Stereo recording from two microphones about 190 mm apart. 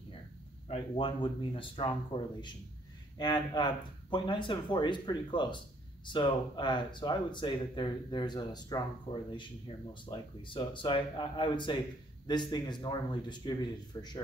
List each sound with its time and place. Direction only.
0.7 s speech: 30° left (ahead or behind)